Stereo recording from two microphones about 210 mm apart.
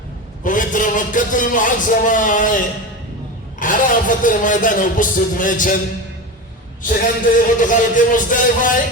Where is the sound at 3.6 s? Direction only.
40° left (ahead or behind).